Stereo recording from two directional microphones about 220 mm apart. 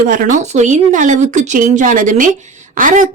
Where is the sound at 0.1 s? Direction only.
35° right (ahead or behind).